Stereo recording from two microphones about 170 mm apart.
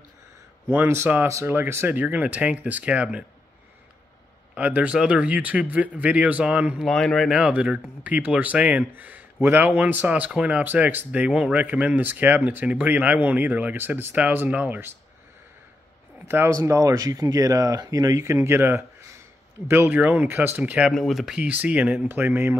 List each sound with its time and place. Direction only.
0.7 s speech: 15° right (ahead or behind)
4.6 s speech: 10° right (ahead or behind)
16.3 s speech: 15° right (ahead or behind)